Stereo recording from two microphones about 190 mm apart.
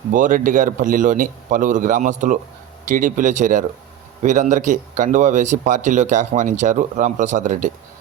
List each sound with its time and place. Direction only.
0.1 s a man's voice: 45° right (ahead or behind)